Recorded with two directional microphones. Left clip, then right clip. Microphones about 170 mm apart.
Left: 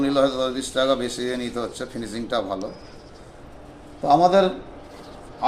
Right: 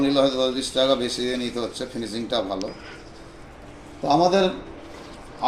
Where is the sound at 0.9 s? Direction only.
30° left (ahead or behind).